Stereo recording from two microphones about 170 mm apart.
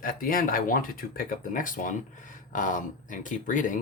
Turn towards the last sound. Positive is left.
turn(degrees=50)  # may be behind; listen again after turning